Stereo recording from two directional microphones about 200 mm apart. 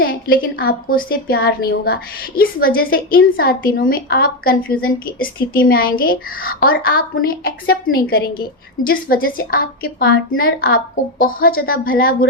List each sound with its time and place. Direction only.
0.0 s a woman's voice: 45° left (ahead or behind)